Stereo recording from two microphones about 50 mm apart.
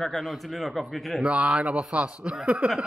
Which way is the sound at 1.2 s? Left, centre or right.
Right.